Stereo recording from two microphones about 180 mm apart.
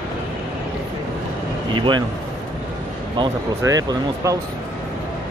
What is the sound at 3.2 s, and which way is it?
Speech, 20° right (ahead or behind).